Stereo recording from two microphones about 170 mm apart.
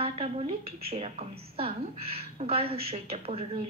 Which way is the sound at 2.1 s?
35° right (ahead or behind).